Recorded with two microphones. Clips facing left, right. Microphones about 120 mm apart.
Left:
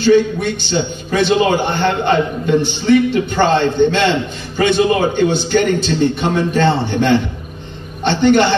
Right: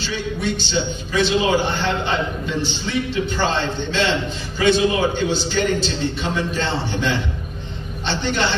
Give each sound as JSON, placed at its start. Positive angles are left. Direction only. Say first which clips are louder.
{"t": 0.0, "sound": "a man's voice", "louder": "left 12 dB", "side_deg": 55}